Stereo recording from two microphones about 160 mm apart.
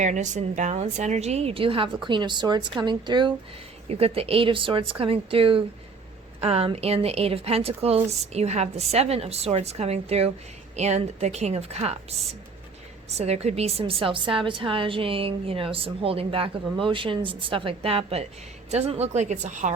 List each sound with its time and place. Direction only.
0.0 s a woman's voice: 50° right (ahead or behind)